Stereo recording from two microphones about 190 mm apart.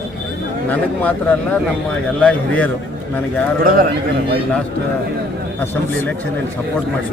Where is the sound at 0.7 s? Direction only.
10° left (ahead or behind).